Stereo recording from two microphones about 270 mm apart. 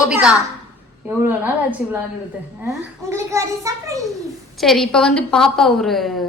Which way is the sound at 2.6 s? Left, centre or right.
Centre.